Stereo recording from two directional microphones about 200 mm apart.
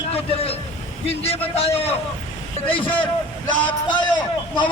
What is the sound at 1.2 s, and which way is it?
Speech, 30° left (ahead or behind).